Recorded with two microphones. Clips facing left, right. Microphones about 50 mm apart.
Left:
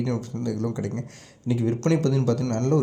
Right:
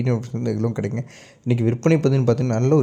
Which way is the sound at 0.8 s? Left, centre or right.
Right.